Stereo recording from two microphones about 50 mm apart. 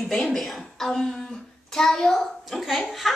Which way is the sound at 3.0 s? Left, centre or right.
Centre.